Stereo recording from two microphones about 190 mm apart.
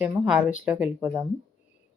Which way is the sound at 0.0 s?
5° right (ahead or behind).